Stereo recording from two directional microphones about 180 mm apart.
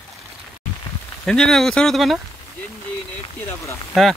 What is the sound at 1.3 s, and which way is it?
Speech, centre (ahead or behind).